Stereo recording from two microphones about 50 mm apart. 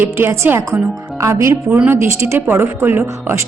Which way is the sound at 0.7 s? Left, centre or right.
Right.